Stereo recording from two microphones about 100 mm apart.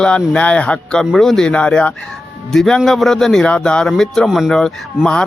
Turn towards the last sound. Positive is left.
turn(degrees=5)  # may be behind; listen again after turning